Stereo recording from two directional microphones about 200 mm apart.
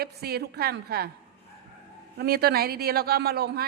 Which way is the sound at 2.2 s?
50° right (ahead or behind).